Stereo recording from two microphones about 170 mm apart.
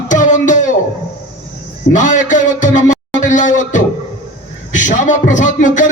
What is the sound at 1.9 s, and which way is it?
Music, 45° left (ahead or behind).